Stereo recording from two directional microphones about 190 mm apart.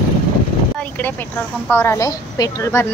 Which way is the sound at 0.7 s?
10° left (ahead or behind).